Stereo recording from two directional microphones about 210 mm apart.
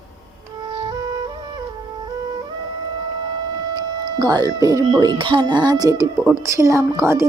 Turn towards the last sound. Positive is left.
turn(degrees=-15)  # may be behind; listen again after turning